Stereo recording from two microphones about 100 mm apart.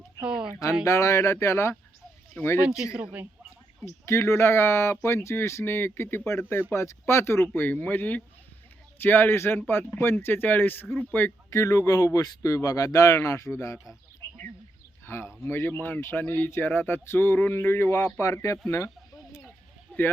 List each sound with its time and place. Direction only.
0.2 s speech: 10° right (ahead or behind)
0.9 s speech: 30° left (ahead or behind)
2.8 s speech: 10° right (ahead or behind)
3.8 s speech: 25° left (ahead or behind)
15.0 s speech: 25° left (ahead or behind)